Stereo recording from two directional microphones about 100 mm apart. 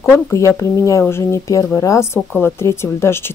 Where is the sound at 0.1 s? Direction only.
25° left (ahead or behind).